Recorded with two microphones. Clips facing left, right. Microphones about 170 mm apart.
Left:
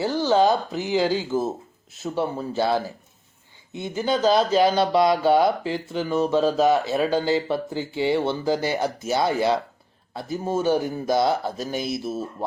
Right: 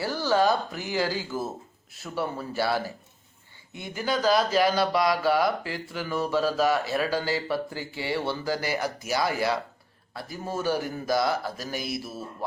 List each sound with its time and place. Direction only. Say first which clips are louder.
0.0 s speech: left 4 dB; 20° left (ahead or behind)